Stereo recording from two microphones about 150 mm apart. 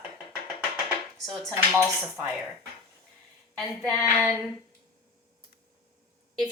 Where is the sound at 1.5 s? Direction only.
15° right (ahead or behind).